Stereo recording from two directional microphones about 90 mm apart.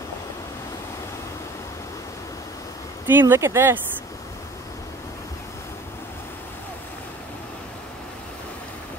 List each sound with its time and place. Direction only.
3.1 s speech: 25° right (ahead or behind)